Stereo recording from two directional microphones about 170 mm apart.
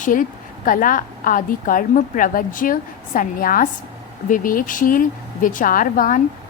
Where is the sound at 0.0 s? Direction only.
50° left (ahead or behind).